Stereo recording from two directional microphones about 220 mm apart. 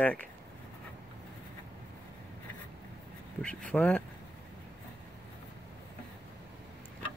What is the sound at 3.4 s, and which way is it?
Speech, 5° left (ahead or behind).